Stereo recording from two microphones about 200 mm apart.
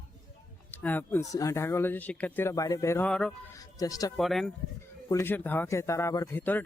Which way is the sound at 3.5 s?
15° left (ahead or behind).